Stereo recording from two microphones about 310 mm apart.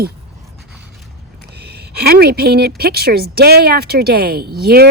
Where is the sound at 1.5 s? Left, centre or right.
Right.